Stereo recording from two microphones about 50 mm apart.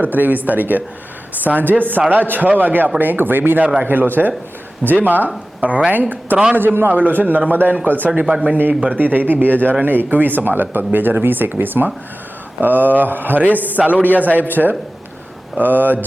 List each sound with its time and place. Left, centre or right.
0.0 s speech: right